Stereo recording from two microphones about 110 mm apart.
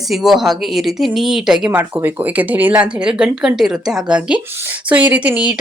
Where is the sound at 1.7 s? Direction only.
20° right (ahead or behind).